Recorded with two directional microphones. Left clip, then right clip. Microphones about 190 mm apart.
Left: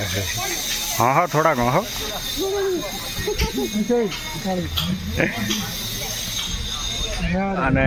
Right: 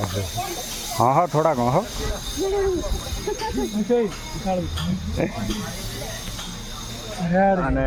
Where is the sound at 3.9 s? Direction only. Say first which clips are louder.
Even; 40° left (ahead or behind).